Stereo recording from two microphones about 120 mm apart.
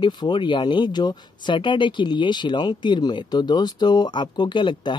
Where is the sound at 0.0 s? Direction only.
40° left (ahead or behind).